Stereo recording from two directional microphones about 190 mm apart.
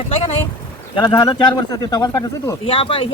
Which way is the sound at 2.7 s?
30° left (ahead or behind).